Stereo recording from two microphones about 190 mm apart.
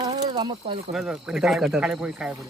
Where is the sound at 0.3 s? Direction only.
25° right (ahead or behind).